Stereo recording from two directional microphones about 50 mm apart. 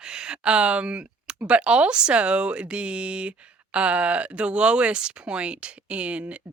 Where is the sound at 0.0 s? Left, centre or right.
Centre.